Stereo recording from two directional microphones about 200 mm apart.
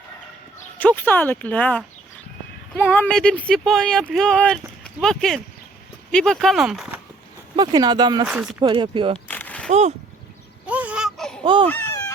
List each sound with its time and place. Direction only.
0.8 s speech: 10° left (ahead or behind)
7.5 s speech: 20° right (ahead or behind)
8.3 s speech: 5° right (ahead or behind)
8.6 s speech: 25° right (ahead or behind)
9.1 s a sound: 5° left (ahead or behind)
9.6 s speech: 35° right (ahead or behind)
10.7 s baby cry: 5° right (ahead or behind)
11.4 s speech: 25° right (ahead or behind)